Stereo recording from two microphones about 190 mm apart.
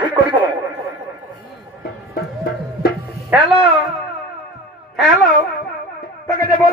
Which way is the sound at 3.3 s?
5° right (ahead or behind).